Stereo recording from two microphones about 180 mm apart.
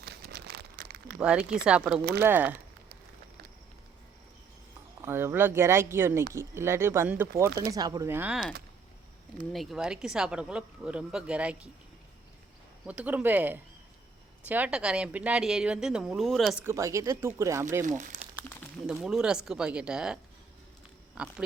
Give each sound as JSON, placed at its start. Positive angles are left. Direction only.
{"t": 0.0, "sound": "crumpling", "side_deg": -60}
{"t": 1.2, "sound": "speech", "side_deg": -5}
{"t": 5.0, "sound": "speech", "side_deg": -10}
{"t": 12.8, "sound": "speech", "side_deg": -5}
{"t": 16.6, "sound": "speech", "side_deg": -15}
{"t": 18.0, "sound": "speech", "side_deg": -40}
{"t": 18.9, "sound": "speech", "side_deg": -5}
{"t": 21.2, "sound": "speech", "side_deg": -5}